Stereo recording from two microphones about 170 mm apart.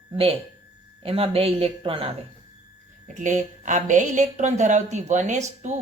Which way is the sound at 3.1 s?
45° right (ahead or behind).